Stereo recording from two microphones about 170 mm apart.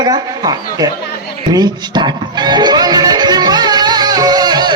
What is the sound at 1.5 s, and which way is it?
Music, 25° right (ahead or behind).